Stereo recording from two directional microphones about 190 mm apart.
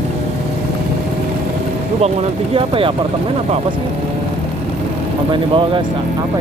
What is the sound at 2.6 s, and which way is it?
Speech, 30° right (ahead or behind).